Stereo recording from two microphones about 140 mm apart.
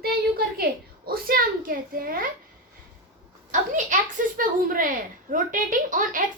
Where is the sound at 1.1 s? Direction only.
90° right.